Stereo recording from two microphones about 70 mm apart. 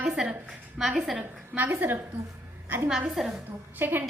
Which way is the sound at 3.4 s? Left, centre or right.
Right.